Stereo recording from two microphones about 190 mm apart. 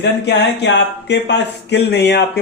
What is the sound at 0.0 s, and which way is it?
A man's voice, 60° left (ahead or behind).